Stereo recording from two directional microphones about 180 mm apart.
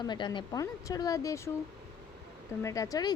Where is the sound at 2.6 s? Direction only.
20° left (ahead or behind).